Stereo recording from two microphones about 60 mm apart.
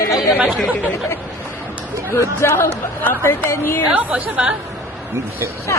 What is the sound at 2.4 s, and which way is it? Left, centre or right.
A woman's voice, left.